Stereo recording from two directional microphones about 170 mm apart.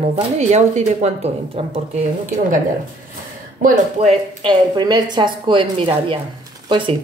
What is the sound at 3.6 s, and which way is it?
Speech, 40° right (ahead or behind).